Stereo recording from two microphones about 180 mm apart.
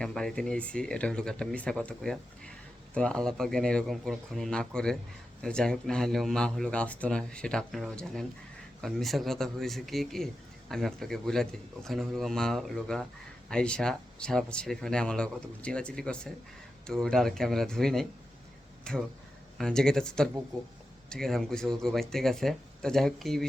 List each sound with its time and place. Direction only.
0.0 s speech: 5° left (ahead or behind)